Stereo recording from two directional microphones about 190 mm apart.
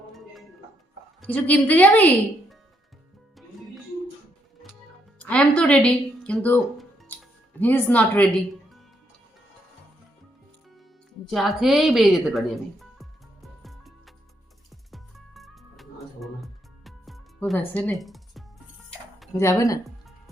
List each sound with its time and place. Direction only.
1.2 s speech: 10° left (ahead or behind)
5.2 s speech: 5° left (ahead or behind)
11.3 s music: centre (ahead or behind)
19.4 s speech: 15° left (ahead or behind)
19.8 s music: centre (ahead or behind)